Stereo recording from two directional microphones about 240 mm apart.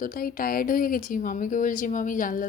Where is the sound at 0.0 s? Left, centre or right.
Left.